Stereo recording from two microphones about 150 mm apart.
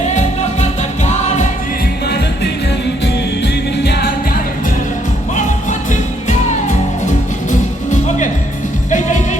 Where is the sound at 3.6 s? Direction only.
90° left; by 4.8 s 65° left (ahead or behind).